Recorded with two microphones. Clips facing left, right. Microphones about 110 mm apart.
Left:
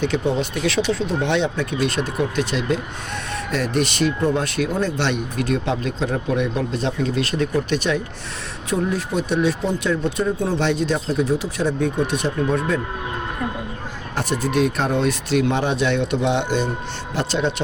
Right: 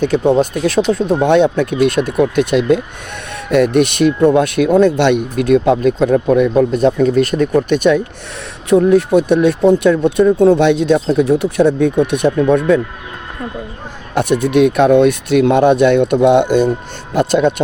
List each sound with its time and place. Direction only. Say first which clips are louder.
0.0 s speech: right 9 dB; 45° right (ahead or behind); by 12.8 s 60° right (ahead or behind)
14.2 s speech: right 9 dB; 60° right (ahead or behind)